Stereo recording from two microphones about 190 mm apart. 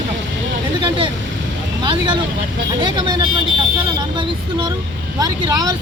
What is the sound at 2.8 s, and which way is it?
Speech, 25° right (ahead or behind).